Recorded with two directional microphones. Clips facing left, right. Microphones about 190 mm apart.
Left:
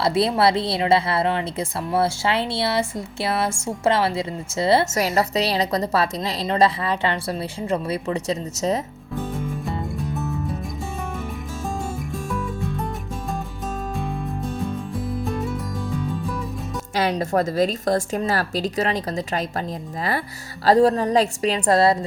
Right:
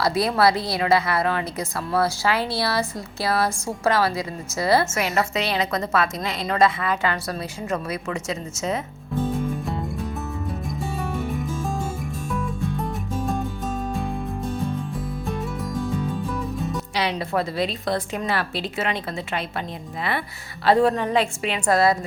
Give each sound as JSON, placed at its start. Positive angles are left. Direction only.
{"t": 0.0, "sound": "a woman's voice", "side_deg": 25}
{"t": 4.9, "sound": "a woman's voice", "side_deg": 35}
{"t": 9.6, "sound": "music", "side_deg": 0}
{"t": 12.8, "sound": "music", "side_deg": 0}
{"t": 15.2, "sound": "music", "side_deg": 0}
{"t": 16.9, "sound": "a woman's voice", "side_deg": 45}